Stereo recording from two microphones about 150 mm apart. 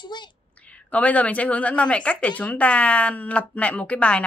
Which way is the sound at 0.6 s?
10° left (ahead or behind).